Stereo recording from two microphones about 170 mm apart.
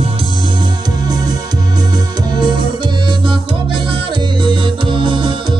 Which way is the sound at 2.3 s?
25° right (ahead or behind).